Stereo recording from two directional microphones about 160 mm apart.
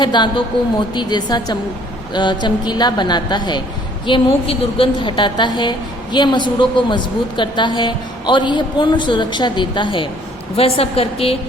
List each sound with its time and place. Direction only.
0.0 s a woman's voice: 30° left (ahead or behind)